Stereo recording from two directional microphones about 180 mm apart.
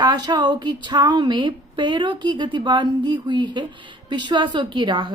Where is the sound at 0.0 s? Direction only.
25° right (ahead or behind).